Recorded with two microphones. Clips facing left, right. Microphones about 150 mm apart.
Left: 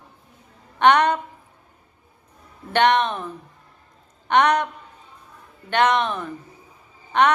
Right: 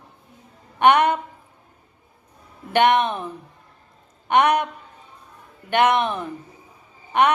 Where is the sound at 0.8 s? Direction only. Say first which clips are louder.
Even; 10° right (ahead or behind).